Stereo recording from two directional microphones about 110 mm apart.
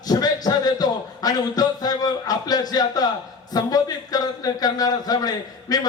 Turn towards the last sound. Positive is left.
turn(degrees=35)  # may be behind; listen again after turning